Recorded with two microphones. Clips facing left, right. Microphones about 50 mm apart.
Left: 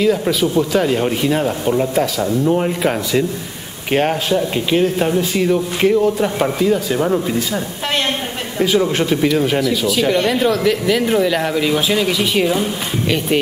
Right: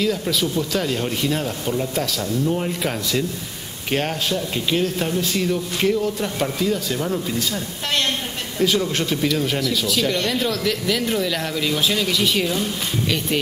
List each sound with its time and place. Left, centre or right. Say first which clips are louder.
0.3 s speech: left 6 dB; centre
8.5 s speech: left 5 dB; centre